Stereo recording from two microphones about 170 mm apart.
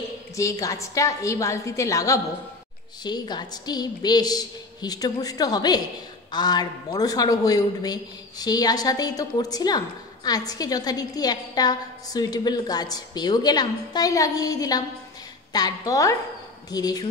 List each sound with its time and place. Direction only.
0.4 s speech: 20° left (ahead or behind)